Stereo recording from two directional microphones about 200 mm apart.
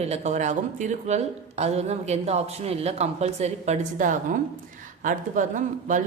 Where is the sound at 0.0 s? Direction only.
35° right (ahead or behind).